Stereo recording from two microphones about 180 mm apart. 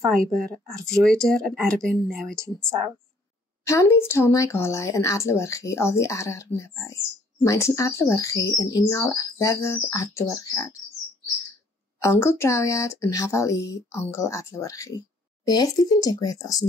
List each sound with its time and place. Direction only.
0.3 s speech: centre (ahead or behind)
3.6 s speech: 15° left (ahead or behind)
12.0 s speech: 15° left (ahead or behind)